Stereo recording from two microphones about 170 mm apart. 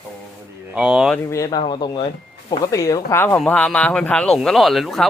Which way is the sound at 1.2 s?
20° left (ahead or behind).